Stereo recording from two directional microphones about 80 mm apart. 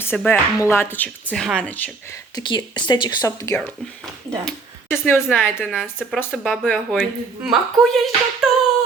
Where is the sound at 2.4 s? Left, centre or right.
Left.